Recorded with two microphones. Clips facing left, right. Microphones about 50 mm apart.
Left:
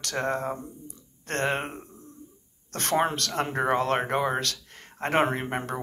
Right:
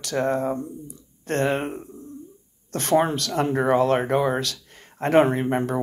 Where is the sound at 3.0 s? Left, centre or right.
Left.